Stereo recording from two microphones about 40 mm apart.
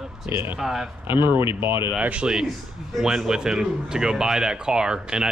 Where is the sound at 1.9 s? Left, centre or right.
Right.